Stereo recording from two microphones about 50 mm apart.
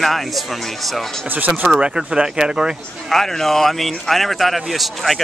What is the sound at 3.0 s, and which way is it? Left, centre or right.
A man's voice, centre.